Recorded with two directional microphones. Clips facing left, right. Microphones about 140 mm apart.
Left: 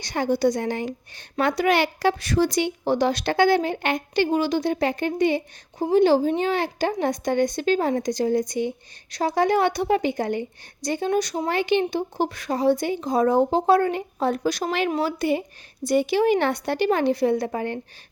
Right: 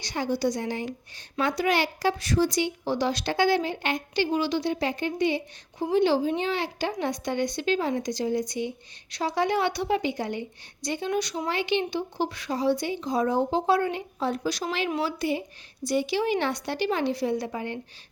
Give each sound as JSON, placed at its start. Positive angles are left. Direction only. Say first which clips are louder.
{"t": 0.0, "sound": "a woman's voice", "louder": "left 5 dB", "side_deg": 50}